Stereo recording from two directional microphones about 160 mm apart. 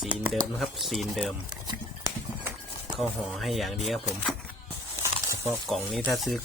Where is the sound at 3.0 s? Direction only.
Centre (ahead or behind).